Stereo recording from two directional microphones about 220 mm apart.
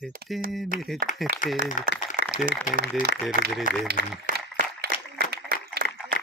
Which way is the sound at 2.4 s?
40° right (ahead or behind).